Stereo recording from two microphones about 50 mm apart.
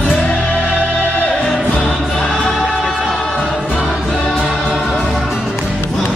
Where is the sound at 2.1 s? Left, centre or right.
Centre.